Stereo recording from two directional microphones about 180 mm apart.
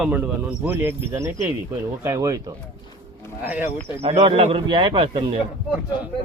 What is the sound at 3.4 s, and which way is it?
Speech, 10° right (ahead or behind).